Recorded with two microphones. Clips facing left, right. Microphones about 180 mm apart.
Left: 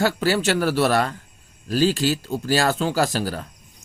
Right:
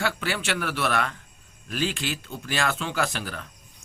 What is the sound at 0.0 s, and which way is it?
Speech, 40° left (ahead or behind).